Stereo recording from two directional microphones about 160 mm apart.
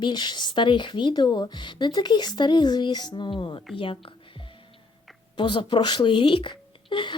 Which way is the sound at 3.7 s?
35° left (ahead or behind).